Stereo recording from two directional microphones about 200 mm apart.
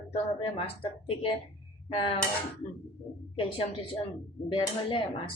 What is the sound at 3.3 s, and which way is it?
Speech, 30° left (ahead or behind).